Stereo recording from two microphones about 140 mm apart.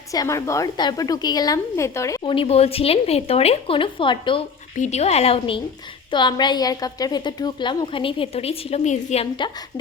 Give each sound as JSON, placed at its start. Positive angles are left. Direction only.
{"t": 0.1, "sound": "a woman's voice", "side_deg": 25}
{"t": 2.2, "sound": "a woman's voice", "side_deg": 40}
{"t": 4.8, "sound": "a woman's voice", "side_deg": 50}